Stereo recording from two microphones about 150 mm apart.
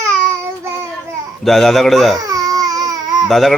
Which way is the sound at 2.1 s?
25° right (ahead or behind).